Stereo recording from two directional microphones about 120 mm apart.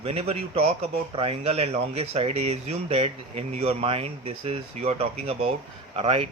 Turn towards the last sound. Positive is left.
turn(degrees=-55)  # may be behind; listen again after turning